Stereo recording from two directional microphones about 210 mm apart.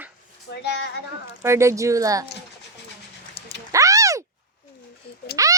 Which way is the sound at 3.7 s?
15° right (ahead or behind).